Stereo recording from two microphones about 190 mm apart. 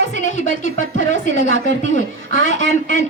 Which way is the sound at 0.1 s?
40° left (ahead or behind).